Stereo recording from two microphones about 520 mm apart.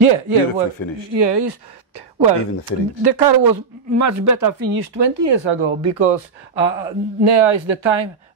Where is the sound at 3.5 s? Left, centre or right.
Right.